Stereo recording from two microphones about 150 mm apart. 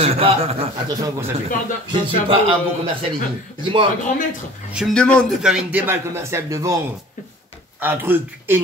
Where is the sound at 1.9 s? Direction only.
35° right (ahead or behind).